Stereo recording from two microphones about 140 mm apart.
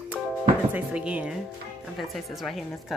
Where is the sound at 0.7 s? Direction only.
10° right (ahead or behind).